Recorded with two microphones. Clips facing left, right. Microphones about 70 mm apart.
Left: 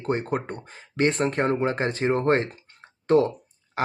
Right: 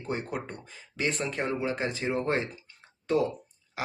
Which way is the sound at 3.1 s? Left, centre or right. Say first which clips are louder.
Left 7 dB; left.